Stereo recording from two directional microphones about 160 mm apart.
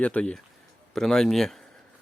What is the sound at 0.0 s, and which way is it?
Speech, 10° left (ahead or behind).